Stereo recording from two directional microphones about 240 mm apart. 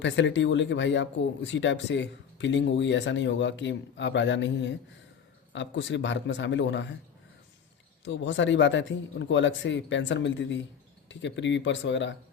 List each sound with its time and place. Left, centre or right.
0.0 s speech: left
8.0 s speech: left